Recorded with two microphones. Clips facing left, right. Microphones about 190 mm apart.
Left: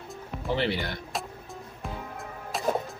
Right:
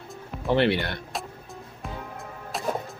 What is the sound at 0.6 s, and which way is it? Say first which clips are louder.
Speech: right 7 dB; 65° right (ahead or behind).